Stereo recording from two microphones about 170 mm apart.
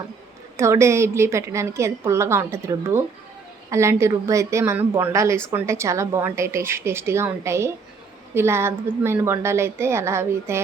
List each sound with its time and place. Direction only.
0.5 s a woman's voice: 15° right (ahead or behind)